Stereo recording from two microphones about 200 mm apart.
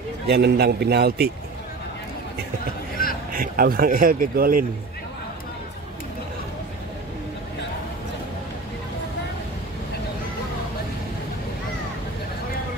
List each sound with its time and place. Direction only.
0.3 s speech: 55° right (ahead or behind)
3.3 s speech: 45° right (ahead or behind)